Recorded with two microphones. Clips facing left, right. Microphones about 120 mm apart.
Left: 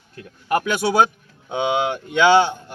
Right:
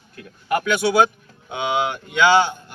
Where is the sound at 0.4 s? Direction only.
40° left (ahead or behind).